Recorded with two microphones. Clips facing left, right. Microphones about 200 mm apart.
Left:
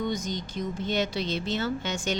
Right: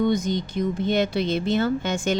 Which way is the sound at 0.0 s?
60° right (ahead or behind).